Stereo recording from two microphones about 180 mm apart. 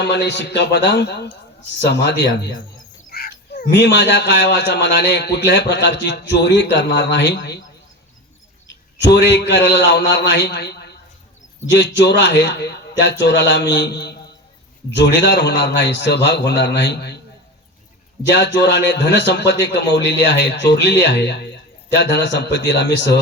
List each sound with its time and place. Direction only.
0.0 s speech: 70° left (ahead or behind)
3.1 s speech: 55° left (ahead or behind)
9.0 s speech: 70° left (ahead or behind)
11.7 s speech: 80° left
18.3 s speech: 75° left (ahead or behind)